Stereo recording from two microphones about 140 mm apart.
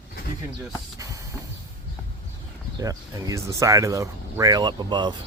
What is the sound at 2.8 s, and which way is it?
Speech, 25° right (ahead or behind).